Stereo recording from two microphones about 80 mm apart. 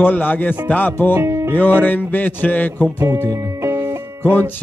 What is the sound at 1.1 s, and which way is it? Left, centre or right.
Music, right.